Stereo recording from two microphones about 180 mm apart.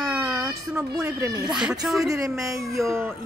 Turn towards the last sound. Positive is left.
turn(degrees=-15)  # may be behind; listen again after turning